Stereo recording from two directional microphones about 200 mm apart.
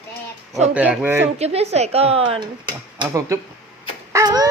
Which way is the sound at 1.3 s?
30° right (ahead or behind).